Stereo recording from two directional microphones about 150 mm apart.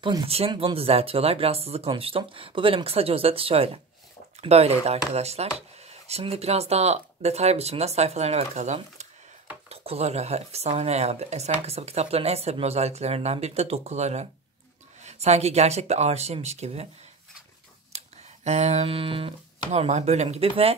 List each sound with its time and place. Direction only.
0.0 s speech: 35° right (ahead or behind)
17.9 s speech: 50° right (ahead or behind)